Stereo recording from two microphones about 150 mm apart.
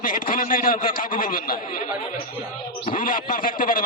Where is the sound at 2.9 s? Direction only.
65° left (ahead or behind).